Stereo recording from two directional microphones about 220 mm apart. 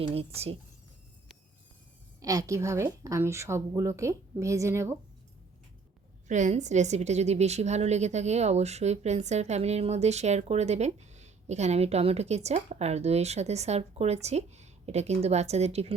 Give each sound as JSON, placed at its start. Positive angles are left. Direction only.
{"t": 0.0, "sound": "a woman's voice", "side_deg": -25}
{"t": 2.2, "sound": "a woman's voice", "side_deg": -15}
{"t": 6.2, "sound": "a woman's voice", "side_deg": -35}